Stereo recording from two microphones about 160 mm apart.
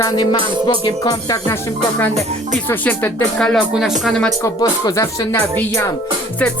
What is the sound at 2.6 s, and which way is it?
Music, 10° left (ahead or behind).